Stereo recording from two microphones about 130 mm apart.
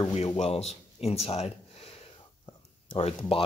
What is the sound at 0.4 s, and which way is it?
Speech, 55° left (ahead or behind).